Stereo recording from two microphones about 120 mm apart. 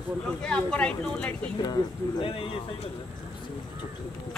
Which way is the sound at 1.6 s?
40° left (ahead or behind).